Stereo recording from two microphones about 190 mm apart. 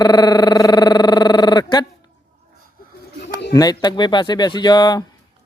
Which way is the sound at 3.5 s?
20° left (ahead or behind).